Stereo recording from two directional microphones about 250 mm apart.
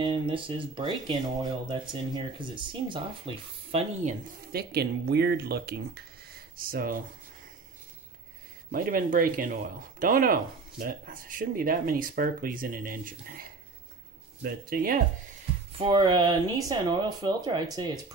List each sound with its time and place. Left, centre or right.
0.0 s speech: right
8.7 s speech: right
15.8 s speech: centre